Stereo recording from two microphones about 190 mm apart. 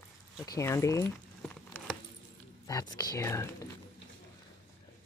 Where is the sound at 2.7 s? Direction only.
20° left (ahead or behind).